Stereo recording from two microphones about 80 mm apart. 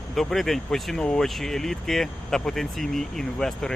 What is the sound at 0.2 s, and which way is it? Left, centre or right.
Speech, centre.